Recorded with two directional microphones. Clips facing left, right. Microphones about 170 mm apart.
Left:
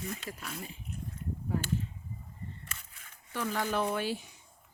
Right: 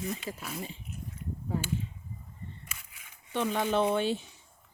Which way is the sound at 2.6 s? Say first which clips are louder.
Left 1 dB; 10° right (ahead or behind).